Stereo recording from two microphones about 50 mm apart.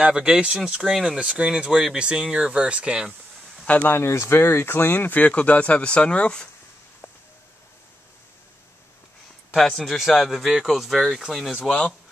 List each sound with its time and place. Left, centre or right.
0.0 s speech: centre
1.1 s speech: right
3.6 s speech: left
3.9 s speech: left
9.8 s speech: centre